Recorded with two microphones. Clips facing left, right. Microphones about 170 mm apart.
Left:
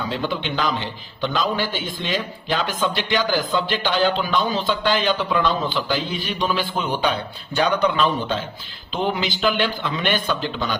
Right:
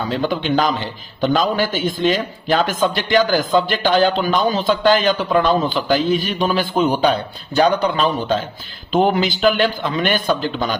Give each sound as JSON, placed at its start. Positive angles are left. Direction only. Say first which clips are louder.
{"t": 0.2, "sound": "a man's voice", "louder": "right 6 dB", "side_deg": -45}